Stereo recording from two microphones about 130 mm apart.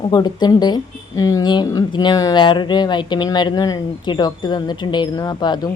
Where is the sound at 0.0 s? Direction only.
35° left (ahead or behind).